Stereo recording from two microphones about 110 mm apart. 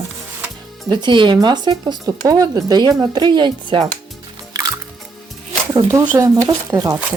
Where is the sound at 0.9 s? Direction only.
45° right (ahead or behind).